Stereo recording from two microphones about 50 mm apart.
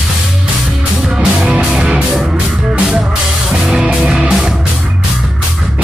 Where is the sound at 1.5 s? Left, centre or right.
Centre.